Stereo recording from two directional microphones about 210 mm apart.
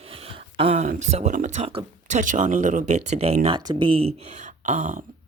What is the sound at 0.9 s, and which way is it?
Speech, 35° right (ahead or behind).